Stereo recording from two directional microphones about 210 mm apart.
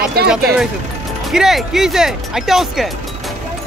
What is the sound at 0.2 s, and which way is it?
Speech, 45° right (ahead or behind).